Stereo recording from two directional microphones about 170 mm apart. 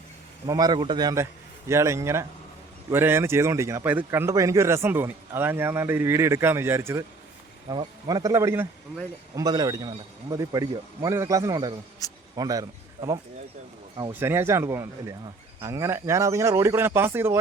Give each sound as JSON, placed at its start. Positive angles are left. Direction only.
{"t": 0.4, "sound": "a man's voice", "side_deg": -25}
{"t": 12.0, "sound": "speech", "side_deg": 20}
{"t": 12.4, "sound": "a man's voice", "side_deg": -20}